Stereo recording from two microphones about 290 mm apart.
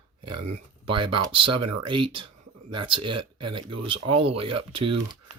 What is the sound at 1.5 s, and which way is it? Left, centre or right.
Speech, right.